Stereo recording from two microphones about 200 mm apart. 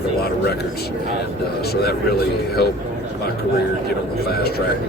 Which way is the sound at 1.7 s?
55° left (ahead or behind).